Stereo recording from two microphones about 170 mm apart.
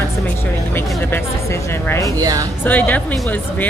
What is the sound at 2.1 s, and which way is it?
Speech, 20° right (ahead or behind).